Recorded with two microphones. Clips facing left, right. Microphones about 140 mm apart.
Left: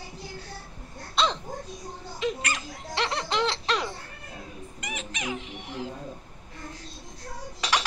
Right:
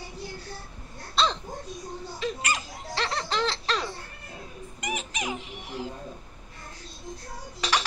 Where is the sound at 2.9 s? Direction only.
20° left (ahead or behind).